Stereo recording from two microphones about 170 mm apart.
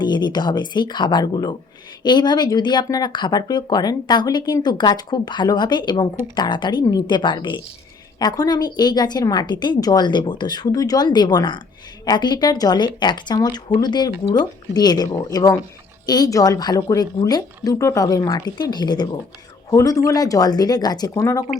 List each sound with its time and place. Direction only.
0.0 s speech: 25° left (ahead or behind)